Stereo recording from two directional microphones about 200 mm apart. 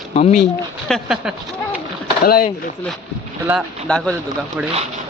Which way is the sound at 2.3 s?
45° left (ahead or behind).